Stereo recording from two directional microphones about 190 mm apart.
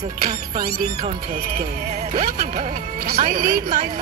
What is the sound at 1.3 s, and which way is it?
Speech, 55° right (ahead or behind).